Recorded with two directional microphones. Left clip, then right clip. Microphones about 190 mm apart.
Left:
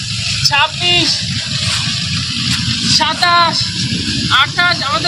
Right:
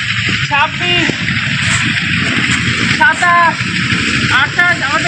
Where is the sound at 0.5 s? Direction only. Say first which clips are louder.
Even; 25° right (ahead or behind).